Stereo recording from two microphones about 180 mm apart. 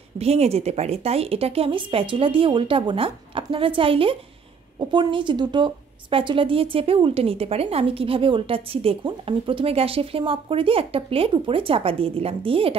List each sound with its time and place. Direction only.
0.2 s a woman's voice: 35° right (ahead or behind)